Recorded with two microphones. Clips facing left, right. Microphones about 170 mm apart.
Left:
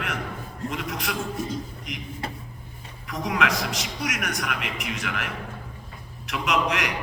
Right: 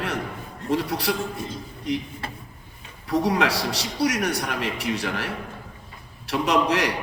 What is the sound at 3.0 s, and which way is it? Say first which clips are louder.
A man's voice: right 5 dB; 35° right (ahead or behind).